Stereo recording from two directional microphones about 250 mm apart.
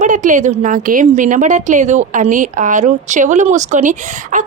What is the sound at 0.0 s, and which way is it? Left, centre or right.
A woman's voice, right.